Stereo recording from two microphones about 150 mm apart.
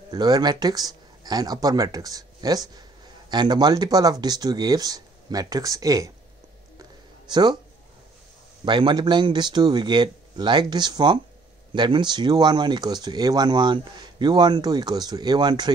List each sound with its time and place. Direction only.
0.1 s speech: 25° right (ahead or behind)
6.8 s a sound: 30° right (ahead or behind)
8.6 s speech: 30° right (ahead or behind)